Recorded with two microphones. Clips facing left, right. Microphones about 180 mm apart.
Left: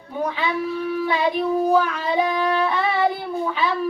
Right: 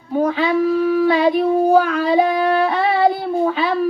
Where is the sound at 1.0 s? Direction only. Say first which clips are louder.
Right 6 dB; 40° right (ahead or behind).